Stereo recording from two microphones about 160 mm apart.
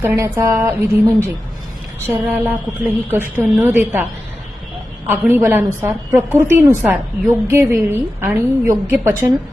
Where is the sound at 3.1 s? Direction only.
15° right (ahead or behind).